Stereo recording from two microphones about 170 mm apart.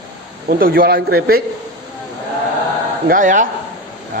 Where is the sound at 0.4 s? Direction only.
60° right (ahead or behind).